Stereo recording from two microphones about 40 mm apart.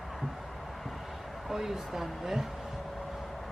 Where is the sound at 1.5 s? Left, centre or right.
Centre.